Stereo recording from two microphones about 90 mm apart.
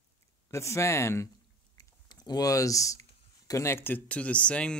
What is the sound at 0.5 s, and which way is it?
Speech, 35° left (ahead or behind).